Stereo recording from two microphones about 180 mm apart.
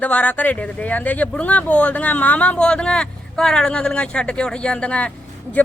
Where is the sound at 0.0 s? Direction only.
10° left (ahead or behind).